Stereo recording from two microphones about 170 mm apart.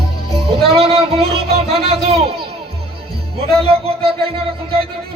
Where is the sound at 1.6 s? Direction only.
35° right (ahead or behind).